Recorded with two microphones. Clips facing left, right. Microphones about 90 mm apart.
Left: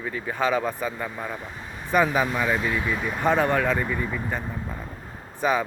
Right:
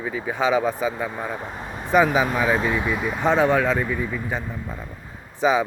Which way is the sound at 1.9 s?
10° right (ahead or behind).